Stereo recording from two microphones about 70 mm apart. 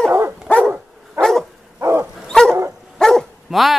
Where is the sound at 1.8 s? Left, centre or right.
Right.